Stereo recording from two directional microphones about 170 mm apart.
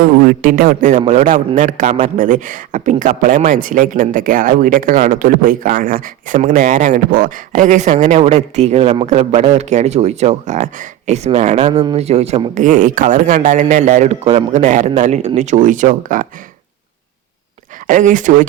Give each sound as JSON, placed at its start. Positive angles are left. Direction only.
{"t": 0.0, "sound": "speech", "side_deg": -55}
{"t": 17.8, "sound": "speech", "side_deg": -50}